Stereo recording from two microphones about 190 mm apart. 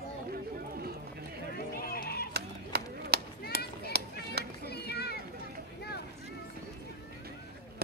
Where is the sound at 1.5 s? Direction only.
50° left (ahead or behind).